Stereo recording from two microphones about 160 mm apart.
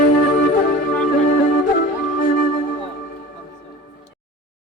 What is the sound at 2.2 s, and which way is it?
Music, 60° left (ahead or behind).